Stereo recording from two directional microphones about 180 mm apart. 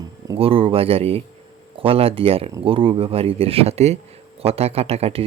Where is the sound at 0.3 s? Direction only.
30° right (ahead or behind).